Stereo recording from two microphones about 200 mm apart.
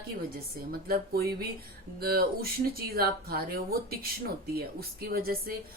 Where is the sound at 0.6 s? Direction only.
45° right (ahead or behind).